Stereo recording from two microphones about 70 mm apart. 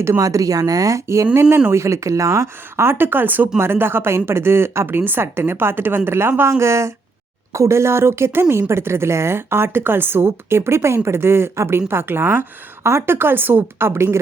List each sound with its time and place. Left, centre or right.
0.2 s speech: right
1.4 s speech: right